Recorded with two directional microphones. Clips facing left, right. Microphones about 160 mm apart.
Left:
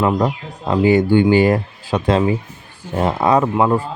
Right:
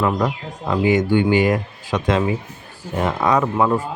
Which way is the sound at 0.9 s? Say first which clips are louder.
Left 4 dB; 35° left (ahead or behind).